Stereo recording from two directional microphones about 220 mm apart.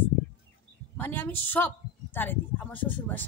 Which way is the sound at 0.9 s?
10° left (ahead or behind).